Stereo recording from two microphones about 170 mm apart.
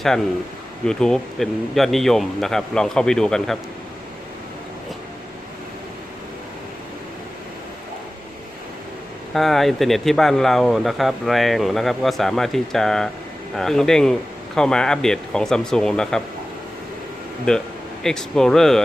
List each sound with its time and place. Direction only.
0.9 s speech: 5° left (ahead or behind)
9.3 s speech: centre (ahead or behind)
17.5 s speech: 5° left (ahead or behind)